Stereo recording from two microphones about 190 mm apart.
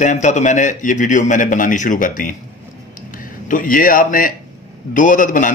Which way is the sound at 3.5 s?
45° left (ahead or behind).